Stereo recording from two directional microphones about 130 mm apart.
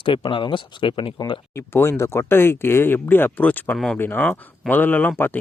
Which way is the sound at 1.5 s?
20° left (ahead or behind).